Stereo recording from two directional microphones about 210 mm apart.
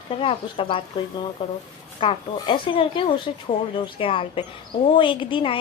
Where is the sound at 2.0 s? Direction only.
25° left (ahead or behind).